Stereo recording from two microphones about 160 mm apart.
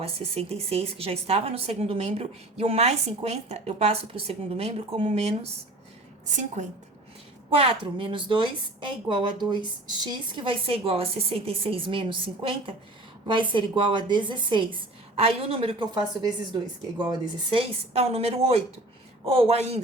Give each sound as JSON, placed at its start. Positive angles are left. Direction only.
{"t": 0.0, "sound": "a woman's voice", "side_deg": -40}
{"t": 7.5, "sound": "speech", "side_deg": -35}